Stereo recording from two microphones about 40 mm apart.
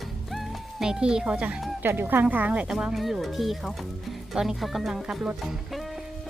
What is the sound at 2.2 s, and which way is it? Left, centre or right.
Speech, right.